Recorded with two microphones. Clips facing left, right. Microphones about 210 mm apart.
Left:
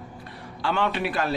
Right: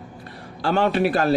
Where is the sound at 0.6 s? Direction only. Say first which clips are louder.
Right 6 dB; 40° right (ahead or behind).